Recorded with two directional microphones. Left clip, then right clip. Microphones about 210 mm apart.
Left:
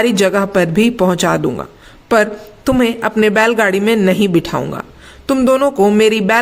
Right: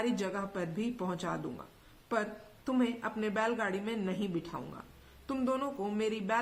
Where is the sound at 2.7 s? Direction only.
40° left (ahead or behind).